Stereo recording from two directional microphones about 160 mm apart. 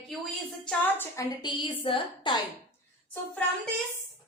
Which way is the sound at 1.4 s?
30° left (ahead or behind).